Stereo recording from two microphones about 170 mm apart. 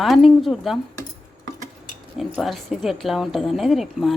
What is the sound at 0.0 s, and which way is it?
Speech, centre (ahead or behind).